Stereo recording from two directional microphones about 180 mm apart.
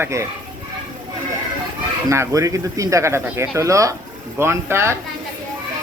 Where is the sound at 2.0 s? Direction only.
15° right (ahead or behind).